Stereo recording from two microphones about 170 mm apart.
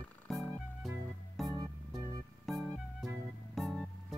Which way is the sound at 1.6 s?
20° right (ahead or behind).